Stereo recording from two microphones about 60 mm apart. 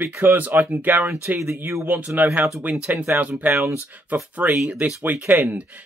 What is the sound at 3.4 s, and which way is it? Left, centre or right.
Speech, right.